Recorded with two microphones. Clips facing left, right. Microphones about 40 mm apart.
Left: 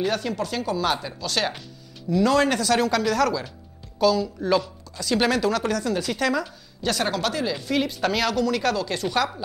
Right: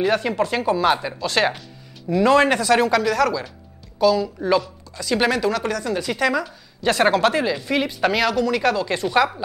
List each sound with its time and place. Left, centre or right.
0.0 s speech: right
3.0 s a woman's voice: centre
6.8 s speech: right
7.6 s a woman's voice: centre